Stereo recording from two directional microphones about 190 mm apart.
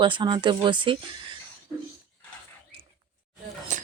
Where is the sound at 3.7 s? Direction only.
40° right (ahead or behind).